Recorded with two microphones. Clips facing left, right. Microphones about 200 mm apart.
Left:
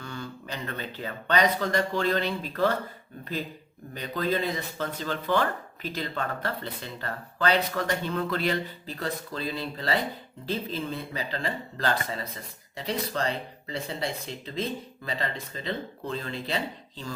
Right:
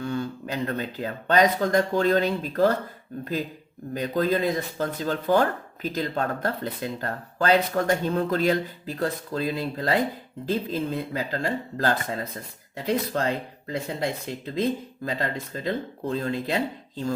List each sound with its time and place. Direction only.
0.0 s speech: 45° right (ahead or behind)
3.9 s speech: 45° right (ahead or behind)